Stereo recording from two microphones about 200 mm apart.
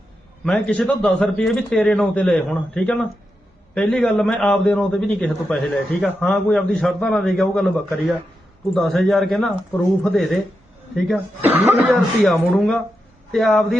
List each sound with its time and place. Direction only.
0.4 s a man's voice: centre (ahead or behind)
11.4 s a man's voice: 10° right (ahead or behind)